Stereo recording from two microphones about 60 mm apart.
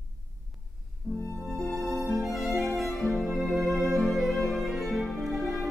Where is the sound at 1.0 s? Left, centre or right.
Right.